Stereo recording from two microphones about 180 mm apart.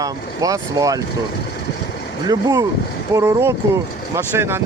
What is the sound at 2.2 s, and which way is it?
Speech, 20° right (ahead or behind).